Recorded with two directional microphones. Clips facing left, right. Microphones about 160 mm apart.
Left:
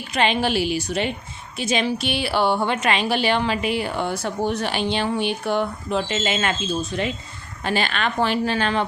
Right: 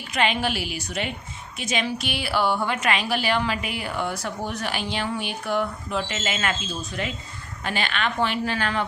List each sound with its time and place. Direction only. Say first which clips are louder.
0.1 s a woman's voice: left 3 dB; 30° left (ahead or behind)